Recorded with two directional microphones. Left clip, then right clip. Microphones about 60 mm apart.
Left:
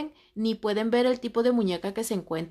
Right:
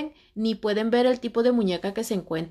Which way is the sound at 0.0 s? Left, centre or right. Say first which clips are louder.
Right 2 dB; left.